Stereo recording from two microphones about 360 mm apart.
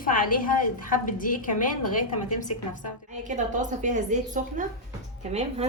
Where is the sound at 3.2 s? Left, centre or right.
Right.